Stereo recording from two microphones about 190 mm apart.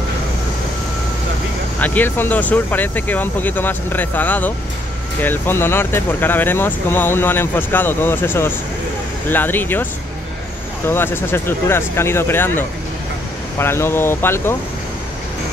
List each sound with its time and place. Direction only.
1.8 s speech: 10° left (ahead or behind)
10.9 s speech: 10° left (ahead or behind)